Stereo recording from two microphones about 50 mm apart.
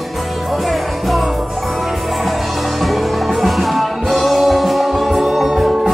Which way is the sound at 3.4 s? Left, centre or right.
Centre.